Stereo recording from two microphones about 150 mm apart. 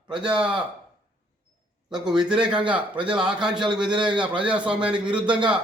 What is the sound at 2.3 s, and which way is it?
A man's voice, 5° right (ahead or behind).